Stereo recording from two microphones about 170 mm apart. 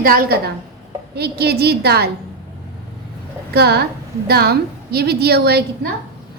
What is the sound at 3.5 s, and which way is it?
A woman's voice, 70° right (ahead or behind).